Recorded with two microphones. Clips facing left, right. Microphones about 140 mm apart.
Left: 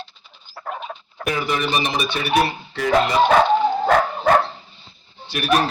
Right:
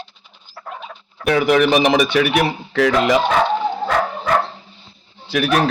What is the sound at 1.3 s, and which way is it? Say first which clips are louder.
Speech: right 8 dB; 85° right.